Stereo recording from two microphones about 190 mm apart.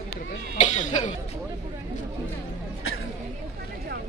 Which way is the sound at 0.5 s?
40° left (ahead or behind).